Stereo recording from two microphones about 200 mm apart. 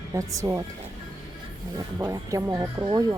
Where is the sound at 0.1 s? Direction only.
15° right (ahead or behind).